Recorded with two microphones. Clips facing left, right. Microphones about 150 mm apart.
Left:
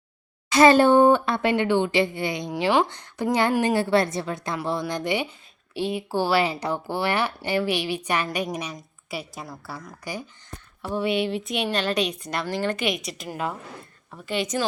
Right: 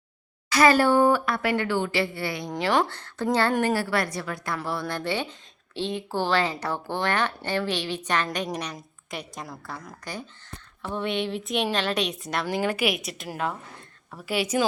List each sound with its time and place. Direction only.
0.5 s a woman's voice: 25° left (ahead or behind); by 14.6 s 5° right (ahead or behind)